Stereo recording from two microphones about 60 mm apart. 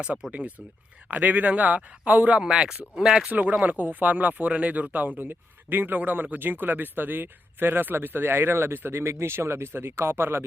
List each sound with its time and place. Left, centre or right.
0.3 s speech: right
2.4 s speech: centre
3.2 s speech: right